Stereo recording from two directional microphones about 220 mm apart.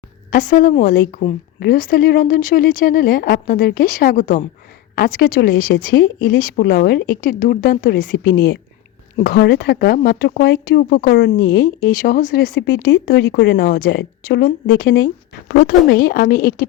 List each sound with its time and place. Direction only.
0.3 s speech: 40° left (ahead or behind)
9.1 s speech: 40° left (ahead or behind)